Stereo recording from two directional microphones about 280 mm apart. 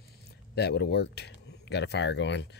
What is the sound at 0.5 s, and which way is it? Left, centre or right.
Speech, left.